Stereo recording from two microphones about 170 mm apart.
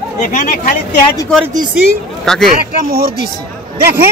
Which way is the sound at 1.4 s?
20° right (ahead or behind).